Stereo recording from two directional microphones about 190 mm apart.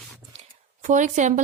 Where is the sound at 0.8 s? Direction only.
40° right (ahead or behind).